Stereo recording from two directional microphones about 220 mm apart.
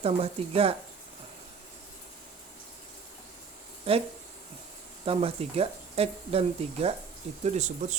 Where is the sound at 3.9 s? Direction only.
25° right (ahead or behind).